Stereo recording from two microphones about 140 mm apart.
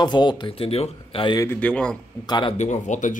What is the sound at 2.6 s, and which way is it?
Speech, 60° left (ahead or behind).